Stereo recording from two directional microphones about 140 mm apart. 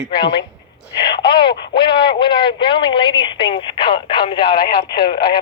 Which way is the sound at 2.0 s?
35° left (ahead or behind).